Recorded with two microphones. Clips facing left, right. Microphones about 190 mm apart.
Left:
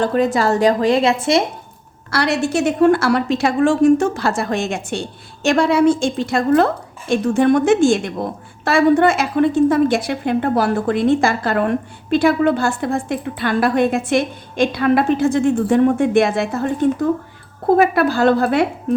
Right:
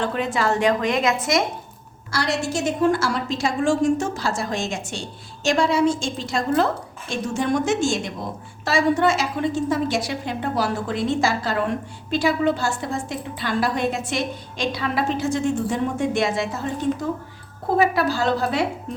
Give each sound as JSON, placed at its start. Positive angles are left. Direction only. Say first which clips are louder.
{"t": 0.0, "sound": "a woman's voice", "louder": "left 7 dB", "side_deg": 40}
{"t": 2.0, "sound": "a woman's voice", "louder": "left 6 dB", "side_deg": 65}